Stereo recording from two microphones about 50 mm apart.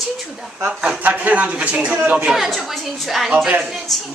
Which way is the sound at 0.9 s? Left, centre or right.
Right.